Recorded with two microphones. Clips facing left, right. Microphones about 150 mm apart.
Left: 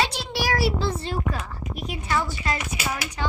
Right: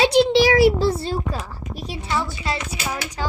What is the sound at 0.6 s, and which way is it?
A child's voice, 40° right (ahead or behind).